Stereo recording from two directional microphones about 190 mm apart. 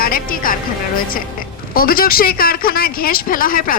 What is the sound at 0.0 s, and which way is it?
Speech, 50° left (ahead or behind).